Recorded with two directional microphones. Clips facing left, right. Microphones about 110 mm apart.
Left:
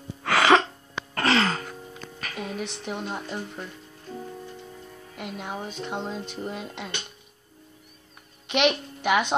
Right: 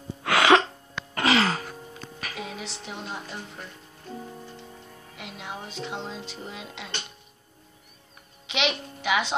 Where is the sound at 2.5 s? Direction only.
55° left (ahead or behind).